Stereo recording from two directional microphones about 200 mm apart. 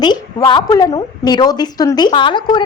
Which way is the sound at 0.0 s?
20° left (ahead or behind).